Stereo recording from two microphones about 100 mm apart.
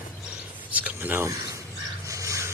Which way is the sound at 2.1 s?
30° right (ahead or behind).